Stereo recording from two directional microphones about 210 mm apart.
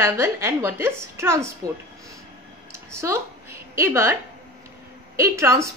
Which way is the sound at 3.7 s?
10° right (ahead or behind).